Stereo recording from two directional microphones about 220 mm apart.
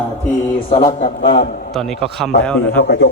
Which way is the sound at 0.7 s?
25° left (ahead or behind).